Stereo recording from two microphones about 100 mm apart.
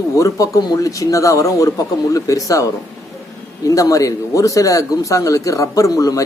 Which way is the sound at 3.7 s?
35° left (ahead or behind).